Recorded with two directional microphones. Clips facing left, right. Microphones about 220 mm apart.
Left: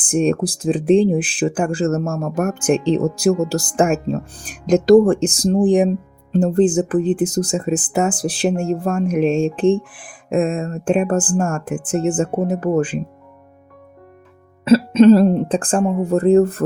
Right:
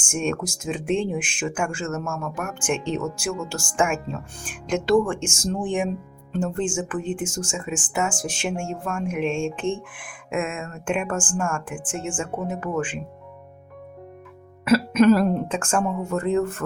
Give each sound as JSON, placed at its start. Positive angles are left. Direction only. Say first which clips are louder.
{"t": 0.0, "sound": "speech", "louder": "left 9 dB", "side_deg": 35}
{"t": 14.6, "sound": "speech", "louder": "left 6 dB", "side_deg": 25}